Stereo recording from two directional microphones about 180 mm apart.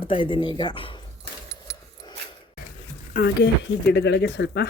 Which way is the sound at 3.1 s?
60° left (ahead or behind).